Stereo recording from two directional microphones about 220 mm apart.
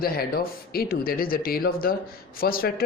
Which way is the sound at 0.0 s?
45° left (ahead or behind).